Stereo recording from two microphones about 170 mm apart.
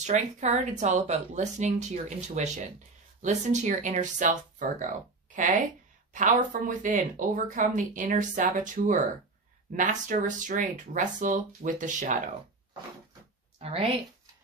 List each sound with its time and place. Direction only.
0.0 s speech: 40° right (ahead or behind)
13.6 s speech: 35° right (ahead or behind)